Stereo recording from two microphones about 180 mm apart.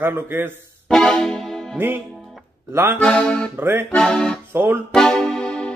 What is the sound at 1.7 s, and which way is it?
Speech, 10° right (ahead or behind).